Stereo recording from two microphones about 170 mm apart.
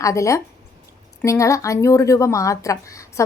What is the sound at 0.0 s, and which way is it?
Speech, 20° left (ahead or behind).